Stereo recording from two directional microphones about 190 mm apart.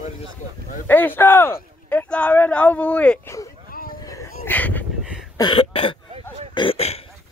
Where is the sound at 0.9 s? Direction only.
10° left (ahead or behind).